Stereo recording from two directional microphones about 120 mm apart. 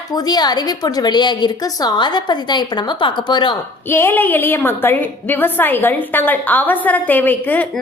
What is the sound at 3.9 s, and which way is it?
A woman's voice, 20° left (ahead or behind).